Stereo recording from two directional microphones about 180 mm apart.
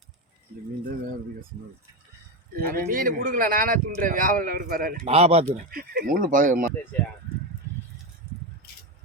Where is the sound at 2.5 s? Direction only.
55° right (ahead or behind).